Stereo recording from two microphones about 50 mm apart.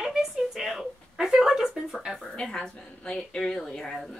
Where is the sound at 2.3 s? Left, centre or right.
Centre.